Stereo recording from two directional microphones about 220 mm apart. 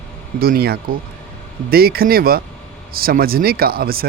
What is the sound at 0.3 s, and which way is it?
A man's voice, 40° right (ahead or behind).